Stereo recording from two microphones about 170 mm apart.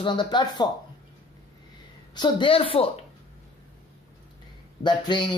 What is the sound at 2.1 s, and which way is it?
Speech, 25° left (ahead or behind).